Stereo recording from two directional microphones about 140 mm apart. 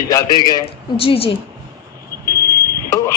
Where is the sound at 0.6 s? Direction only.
40° left (ahead or behind).